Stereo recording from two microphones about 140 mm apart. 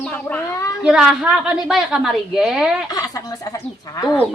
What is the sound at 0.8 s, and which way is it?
A woman's voice, 5° right (ahead or behind).